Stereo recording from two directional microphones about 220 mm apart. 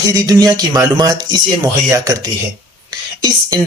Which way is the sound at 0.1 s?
15° right (ahead or behind).